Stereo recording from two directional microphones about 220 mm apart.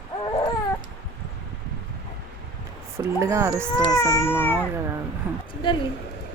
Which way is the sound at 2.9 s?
15° right (ahead or behind).